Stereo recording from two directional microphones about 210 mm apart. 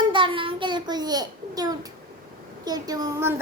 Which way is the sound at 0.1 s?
25° right (ahead or behind).